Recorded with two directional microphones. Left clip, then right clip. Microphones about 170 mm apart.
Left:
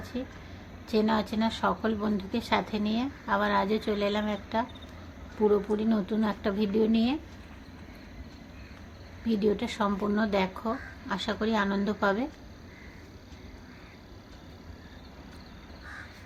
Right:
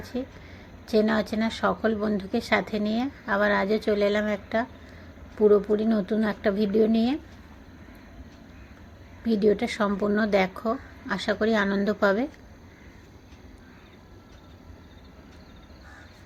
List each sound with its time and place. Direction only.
0.0 s a woman's voice: 20° right (ahead or behind)
9.2 s speech: 20° right (ahead or behind)